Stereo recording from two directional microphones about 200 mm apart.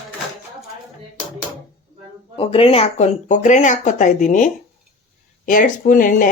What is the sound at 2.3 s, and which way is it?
Speech, 25° left (ahead or behind).